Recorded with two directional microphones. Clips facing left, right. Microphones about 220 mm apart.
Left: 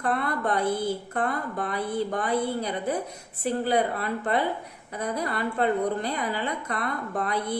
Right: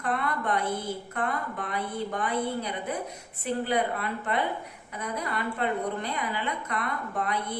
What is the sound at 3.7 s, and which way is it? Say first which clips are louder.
Speech: left 4 dB; 35° left (ahead or behind).